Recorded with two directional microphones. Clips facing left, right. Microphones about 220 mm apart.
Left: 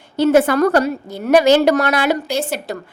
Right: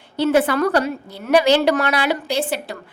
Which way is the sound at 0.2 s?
45° left (ahead or behind).